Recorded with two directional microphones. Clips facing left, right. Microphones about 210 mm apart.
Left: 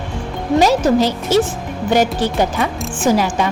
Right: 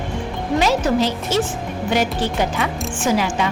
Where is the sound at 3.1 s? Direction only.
40° left (ahead or behind).